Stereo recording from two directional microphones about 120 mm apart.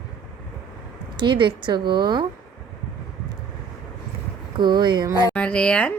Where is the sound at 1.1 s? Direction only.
40° right (ahead or behind).